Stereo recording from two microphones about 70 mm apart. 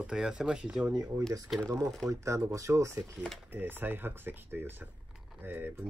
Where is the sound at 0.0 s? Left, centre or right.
Centre.